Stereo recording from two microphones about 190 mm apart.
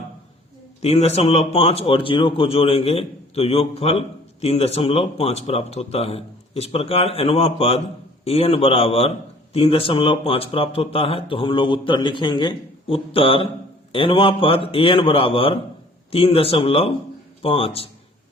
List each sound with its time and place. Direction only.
0.8 s a man's voice: 35° left (ahead or behind)